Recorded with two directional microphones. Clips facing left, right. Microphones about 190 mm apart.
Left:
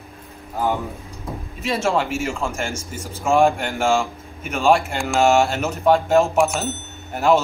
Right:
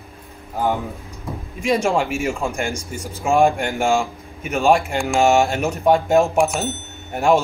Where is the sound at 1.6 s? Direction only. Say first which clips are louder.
Right 2 dB; 15° right (ahead or behind).